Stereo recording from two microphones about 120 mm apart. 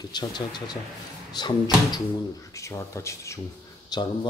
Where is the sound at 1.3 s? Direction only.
40° left (ahead or behind).